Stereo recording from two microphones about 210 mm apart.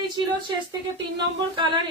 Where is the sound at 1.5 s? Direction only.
25° right (ahead or behind).